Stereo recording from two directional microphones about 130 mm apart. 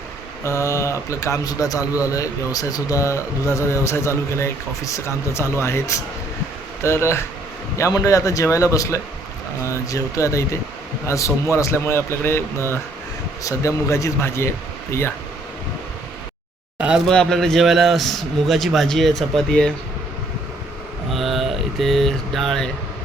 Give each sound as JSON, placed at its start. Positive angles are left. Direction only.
{"t": 0.4, "sound": "speech", "side_deg": 20}
{"t": 16.7, "sound": "a sound", "side_deg": -10}
{"t": 17.1, "sound": "a man's voice", "side_deg": 5}
{"t": 21.1, "sound": "speech", "side_deg": 0}